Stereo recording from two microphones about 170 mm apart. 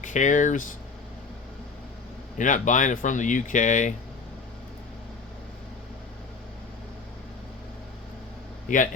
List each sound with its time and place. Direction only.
0.0 s speech: 45° left (ahead or behind)
2.4 s speech: 50° left (ahead or behind)
8.6 s speech: 50° left (ahead or behind)